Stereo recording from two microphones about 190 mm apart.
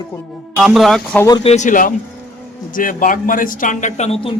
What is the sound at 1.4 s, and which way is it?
Speech, 35° left (ahead or behind).